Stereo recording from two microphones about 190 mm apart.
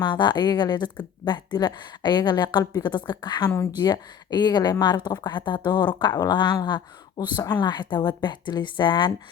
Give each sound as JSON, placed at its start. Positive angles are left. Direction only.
{"t": 0.0, "sound": "a woman's voice", "side_deg": 25}